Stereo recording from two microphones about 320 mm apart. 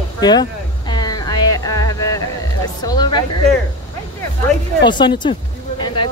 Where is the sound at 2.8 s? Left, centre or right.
Centre.